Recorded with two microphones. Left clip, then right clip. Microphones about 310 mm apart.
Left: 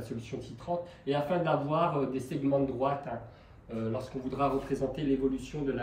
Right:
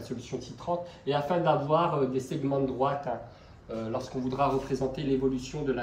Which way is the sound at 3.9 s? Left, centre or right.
Centre.